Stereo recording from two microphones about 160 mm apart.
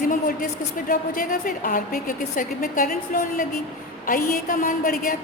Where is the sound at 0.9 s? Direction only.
60° left (ahead or behind).